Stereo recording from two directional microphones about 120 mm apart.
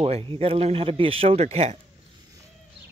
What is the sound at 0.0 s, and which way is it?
Speech, 50° right (ahead or behind).